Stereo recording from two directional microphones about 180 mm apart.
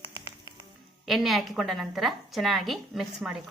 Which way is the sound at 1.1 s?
Centre (ahead or behind).